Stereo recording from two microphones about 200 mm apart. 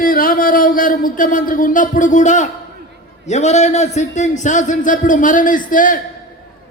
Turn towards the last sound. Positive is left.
turn(degrees=40)  # may be behind; listen again after turning